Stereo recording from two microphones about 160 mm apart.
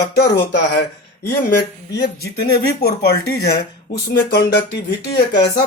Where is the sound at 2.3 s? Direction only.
80° left.